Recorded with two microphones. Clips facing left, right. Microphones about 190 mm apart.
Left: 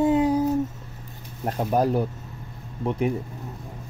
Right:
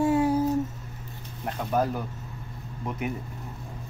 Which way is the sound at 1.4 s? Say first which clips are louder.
Left 4 dB; 35° left (ahead or behind).